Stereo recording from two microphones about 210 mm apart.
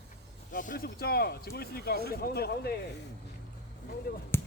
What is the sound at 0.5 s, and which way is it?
Speech, 40° left (ahead or behind).